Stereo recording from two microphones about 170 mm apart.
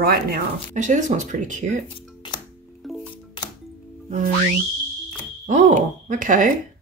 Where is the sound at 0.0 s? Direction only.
65° right (ahead or behind).